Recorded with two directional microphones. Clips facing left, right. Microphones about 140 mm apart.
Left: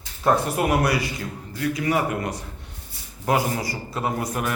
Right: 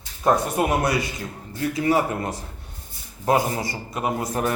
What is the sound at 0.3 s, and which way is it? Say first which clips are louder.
A man's voice: even; 25° right (ahead or behind).